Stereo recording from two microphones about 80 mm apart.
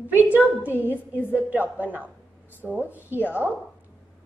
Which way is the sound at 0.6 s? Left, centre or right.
Right.